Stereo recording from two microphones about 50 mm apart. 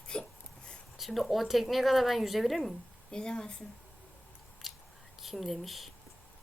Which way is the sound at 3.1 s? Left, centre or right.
Centre.